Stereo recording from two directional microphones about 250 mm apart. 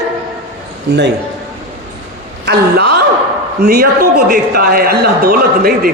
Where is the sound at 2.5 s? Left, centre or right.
Right.